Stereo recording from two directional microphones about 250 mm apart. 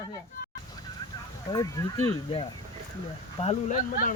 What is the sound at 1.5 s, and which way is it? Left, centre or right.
Speech, centre.